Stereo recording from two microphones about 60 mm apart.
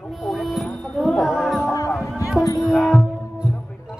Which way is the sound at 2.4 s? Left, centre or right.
Left.